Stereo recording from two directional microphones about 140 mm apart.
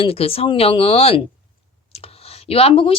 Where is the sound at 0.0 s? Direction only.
45° left (ahead or behind).